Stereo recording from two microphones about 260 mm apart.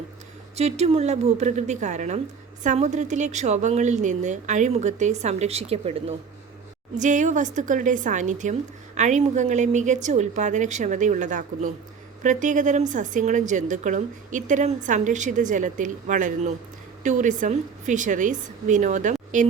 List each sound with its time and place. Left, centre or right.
0.5 s a woman's voice: right